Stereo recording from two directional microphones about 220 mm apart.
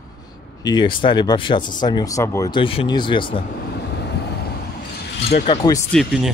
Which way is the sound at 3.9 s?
50° left (ahead or behind).